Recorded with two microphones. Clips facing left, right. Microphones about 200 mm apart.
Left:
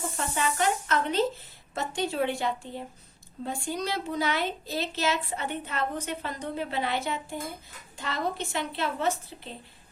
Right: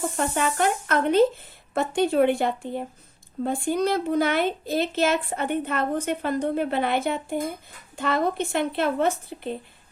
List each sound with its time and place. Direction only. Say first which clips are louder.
0.2 s a woman's voice: right 4 dB; 55° right (ahead or behind)